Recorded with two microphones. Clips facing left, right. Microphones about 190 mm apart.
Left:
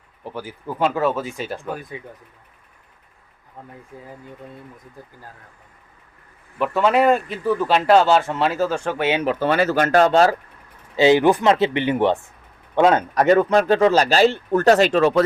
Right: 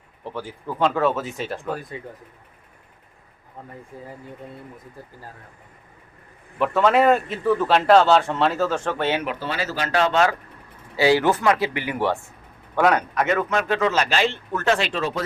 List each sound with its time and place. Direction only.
0.3 s a man's voice: 5° left (ahead or behind)
6.6 s a man's voice: centre (ahead or behind)
9.4 s speech: 55° left (ahead or behind); by 10.3 s 40° left (ahead or behind)
10.9 s speech: 20° left (ahead or behind); by 15.0 s 45° left (ahead or behind)